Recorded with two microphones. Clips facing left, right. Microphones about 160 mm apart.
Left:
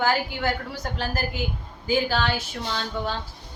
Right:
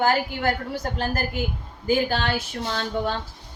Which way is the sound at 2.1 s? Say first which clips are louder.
Even; 50° right (ahead or behind).